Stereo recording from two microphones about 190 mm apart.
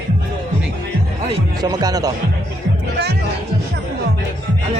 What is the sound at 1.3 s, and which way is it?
Speech, 20° right (ahead or behind).